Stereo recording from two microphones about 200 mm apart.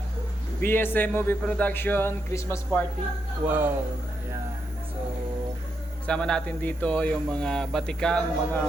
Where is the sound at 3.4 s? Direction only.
10° right (ahead or behind).